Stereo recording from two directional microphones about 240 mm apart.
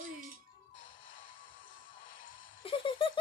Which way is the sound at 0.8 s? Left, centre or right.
Left.